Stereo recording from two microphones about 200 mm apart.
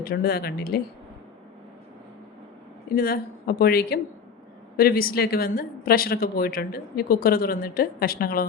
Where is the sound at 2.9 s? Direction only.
50° left (ahead or behind).